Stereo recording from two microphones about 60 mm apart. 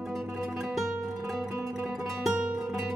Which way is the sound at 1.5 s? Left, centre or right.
Right.